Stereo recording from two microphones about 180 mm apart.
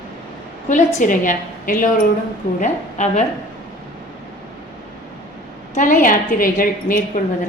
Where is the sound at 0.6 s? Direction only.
45° left (ahead or behind).